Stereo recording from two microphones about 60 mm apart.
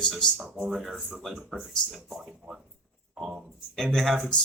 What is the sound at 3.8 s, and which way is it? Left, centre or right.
Speech, centre.